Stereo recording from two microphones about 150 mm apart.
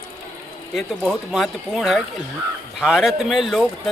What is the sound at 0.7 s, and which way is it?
Speech, centre (ahead or behind).